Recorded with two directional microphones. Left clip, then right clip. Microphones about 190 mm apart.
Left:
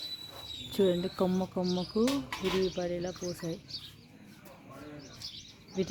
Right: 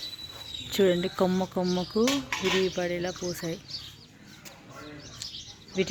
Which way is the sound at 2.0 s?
35° right (ahead or behind).